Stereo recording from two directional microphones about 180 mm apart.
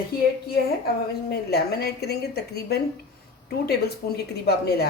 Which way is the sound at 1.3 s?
60° left (ahead or behind).